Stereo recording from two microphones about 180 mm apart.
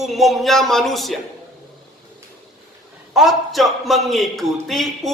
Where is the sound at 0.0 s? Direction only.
Centre (ahead or behind).